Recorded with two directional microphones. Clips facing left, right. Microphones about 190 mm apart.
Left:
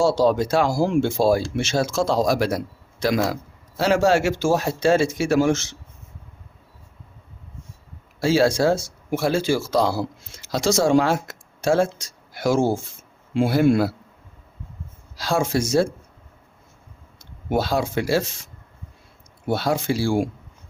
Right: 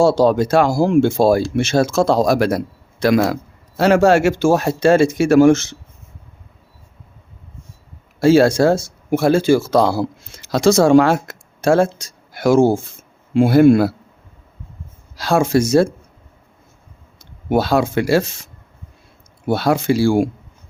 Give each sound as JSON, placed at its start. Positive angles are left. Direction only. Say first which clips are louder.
{"t": 0.0, "sound": "speech", "louder": "right 5 dB", "side_deg": -55}
{"t": 8.2, "sound": "speech", "louder": "right 6 dB", "side_deg": -55}
{"t": 15.1, "sound": "speech", "louder": "right 6 dB", "side_deg": -60}
{"t": 17.5, "sound": "speech", "louder": "right 6 dB", "side_deg": -65}
{"t": 19.5, "sound": "speech", "louder": "right 6 dB", "side_deg": -70}